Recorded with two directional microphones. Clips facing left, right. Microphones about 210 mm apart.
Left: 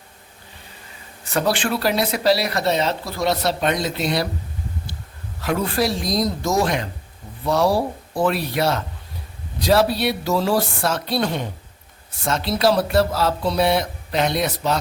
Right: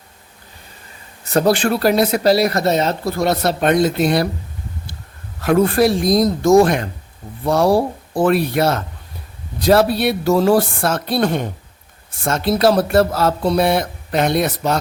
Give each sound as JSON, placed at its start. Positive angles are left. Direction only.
{"t": 1.3, "sound": "speech", "side_deg": -40}
{"t": 5.4, "sound": "speech", "side_deg": -50}